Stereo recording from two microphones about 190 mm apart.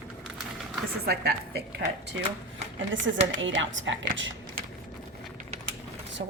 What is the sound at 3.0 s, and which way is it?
Speech, 40° right (ahead or behind).